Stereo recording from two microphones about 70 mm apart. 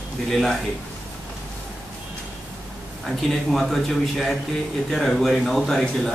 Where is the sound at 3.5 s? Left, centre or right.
Centre.